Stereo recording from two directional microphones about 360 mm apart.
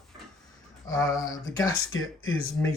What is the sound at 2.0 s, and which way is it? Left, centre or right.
Speech, left.